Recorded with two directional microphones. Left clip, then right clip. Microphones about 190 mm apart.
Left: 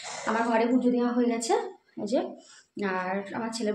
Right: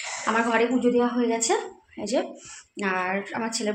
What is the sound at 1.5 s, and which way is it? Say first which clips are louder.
Speech: left 1 dB; 25° right (ahead or behind).